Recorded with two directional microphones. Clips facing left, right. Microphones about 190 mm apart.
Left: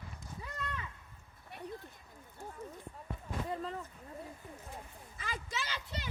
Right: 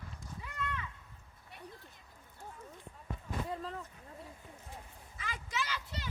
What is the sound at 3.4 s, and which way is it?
Speech, centre (ahead or behind).